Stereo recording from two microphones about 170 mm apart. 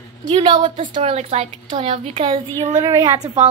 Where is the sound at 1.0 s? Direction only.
40° right (ahead or behind).